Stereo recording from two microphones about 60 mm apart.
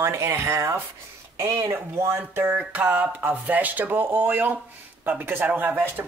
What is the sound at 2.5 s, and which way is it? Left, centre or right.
Speech, right.